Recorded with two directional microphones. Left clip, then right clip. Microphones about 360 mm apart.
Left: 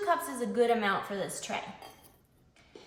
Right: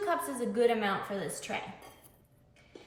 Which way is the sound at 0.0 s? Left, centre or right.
Centre.